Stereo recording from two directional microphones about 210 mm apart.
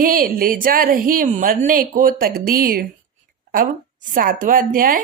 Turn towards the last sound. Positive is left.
turn(degrees=-40)  # may be behind; listen again after turning